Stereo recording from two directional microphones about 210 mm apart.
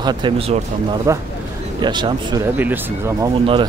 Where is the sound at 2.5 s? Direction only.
10° right (ahead or behind).